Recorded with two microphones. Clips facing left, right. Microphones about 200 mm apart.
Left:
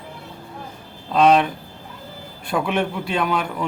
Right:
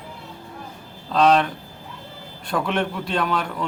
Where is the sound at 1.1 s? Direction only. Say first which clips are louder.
Left 2 dB; 10° left (ahead or behind).